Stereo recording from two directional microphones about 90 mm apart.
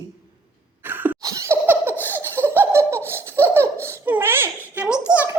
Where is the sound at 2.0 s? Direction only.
20° right (ahead or behind).